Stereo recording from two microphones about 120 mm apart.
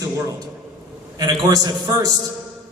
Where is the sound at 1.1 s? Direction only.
35° right (ahead or behind).